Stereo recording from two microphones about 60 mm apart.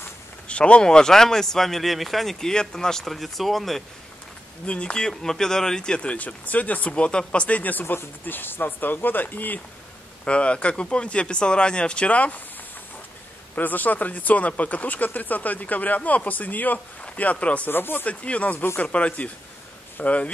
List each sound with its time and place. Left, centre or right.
0.5 s speech: centre
4.6 s speech: centre
10.2 s speech: centre
13.6 s speech: left
17.6 s speech: left
18.0 s speech: left